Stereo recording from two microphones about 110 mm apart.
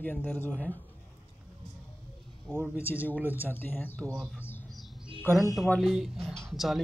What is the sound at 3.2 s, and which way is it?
Speech, 15° right (ahead or behind).